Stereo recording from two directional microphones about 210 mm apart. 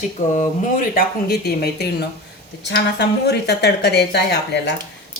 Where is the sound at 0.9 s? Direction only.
45° left (ahead or behind).